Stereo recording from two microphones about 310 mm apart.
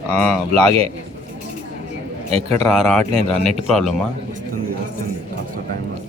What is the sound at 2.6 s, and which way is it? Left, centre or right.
Speech, centre.